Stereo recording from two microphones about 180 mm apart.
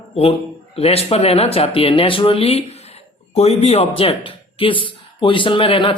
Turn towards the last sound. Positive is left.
turn(degrees=30)  # may be behind; listen again after turning